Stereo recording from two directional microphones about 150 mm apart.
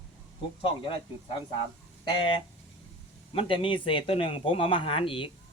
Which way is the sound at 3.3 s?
35° left (ahead or behind).